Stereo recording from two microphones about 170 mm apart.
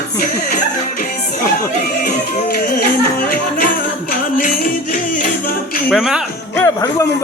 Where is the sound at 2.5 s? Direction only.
55° left (ahead or behind).